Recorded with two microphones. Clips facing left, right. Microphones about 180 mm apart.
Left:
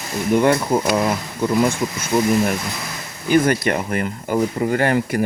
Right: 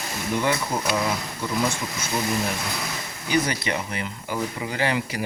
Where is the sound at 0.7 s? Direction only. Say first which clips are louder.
Left 9 dB; 55° left (ahead or behind).